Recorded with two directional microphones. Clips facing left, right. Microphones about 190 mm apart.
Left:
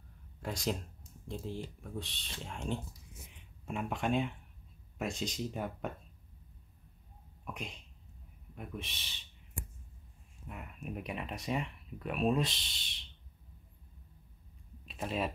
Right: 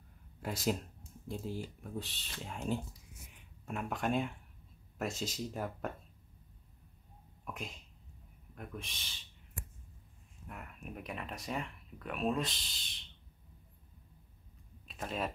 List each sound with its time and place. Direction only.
0.4 s speech: 5° right (ahead or behind)
7.4 s speech: centre (ahead or behind)
10.5 s speech: 5° left (ahead or behind)
14.9 s speech: 5° left (ahead or behind)